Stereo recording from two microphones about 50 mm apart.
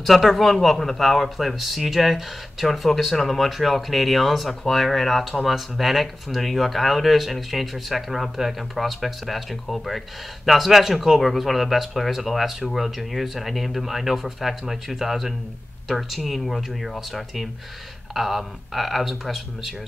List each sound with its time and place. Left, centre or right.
0.0 s speech: centre